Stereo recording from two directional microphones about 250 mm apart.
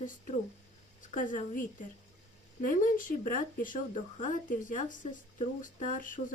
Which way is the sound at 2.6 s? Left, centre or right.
Left.